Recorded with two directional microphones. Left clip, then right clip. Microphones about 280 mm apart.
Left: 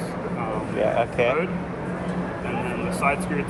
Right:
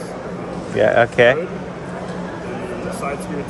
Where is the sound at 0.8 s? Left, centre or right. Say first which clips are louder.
Right 9 dB; right.